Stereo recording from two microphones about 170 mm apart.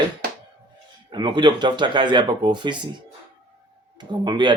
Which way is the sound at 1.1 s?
25° right (ahead or behind).